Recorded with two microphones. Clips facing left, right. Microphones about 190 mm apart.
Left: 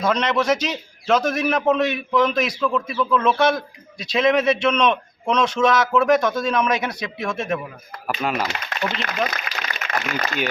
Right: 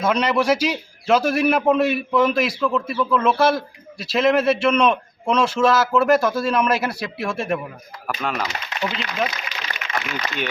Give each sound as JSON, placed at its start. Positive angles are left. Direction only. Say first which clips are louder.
{"t": 0.0, "sound": "a man's voice", "louder": "right 1 dB", "side_deg": -10}
{"t": 8.0, "sound": "speech", "louder": "left 2 dB", "side_deg": 5}
{"t": 8.8, "sound": "speech", "louder": "even", "side_deg": 50}